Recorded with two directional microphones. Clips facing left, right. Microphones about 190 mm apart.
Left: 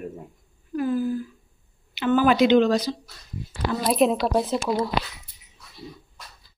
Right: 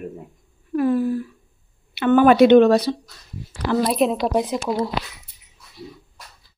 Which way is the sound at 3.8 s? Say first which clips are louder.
Left 2 dB; centre (ahead or behind).